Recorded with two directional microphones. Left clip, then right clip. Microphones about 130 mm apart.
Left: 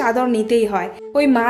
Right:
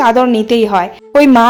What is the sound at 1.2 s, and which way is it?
Speech, 60° right (ahead or behind).